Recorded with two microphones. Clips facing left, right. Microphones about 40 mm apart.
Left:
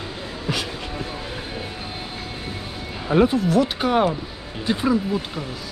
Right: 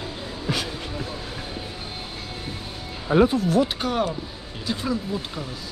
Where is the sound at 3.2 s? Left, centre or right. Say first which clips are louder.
Left 1 dB; left.